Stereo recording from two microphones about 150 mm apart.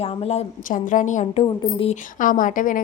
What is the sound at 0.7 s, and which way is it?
A woman's voice, 60° left (ahead or behind).